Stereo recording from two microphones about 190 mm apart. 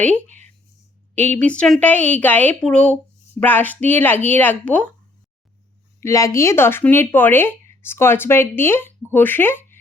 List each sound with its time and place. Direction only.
0.3 s a sound: 40° right (ahead or behind)
1.1 s speech: 10° left (ahead or behind)
6.0 s speech: 15° left (ahead or behind)